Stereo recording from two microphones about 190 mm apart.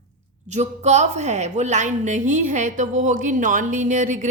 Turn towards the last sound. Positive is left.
turn(degrees=-40)  # may be behind; listen again after turning